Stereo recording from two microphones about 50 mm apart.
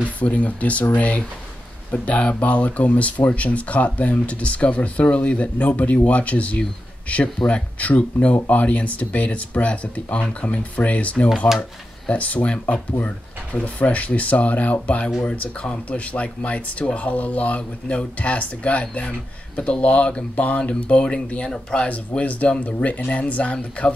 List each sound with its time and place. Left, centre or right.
0.2 s speech: left
15.0 s speech: centre
21.8 s speech: left